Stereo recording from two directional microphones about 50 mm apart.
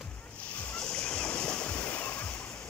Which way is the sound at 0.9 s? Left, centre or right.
Centre.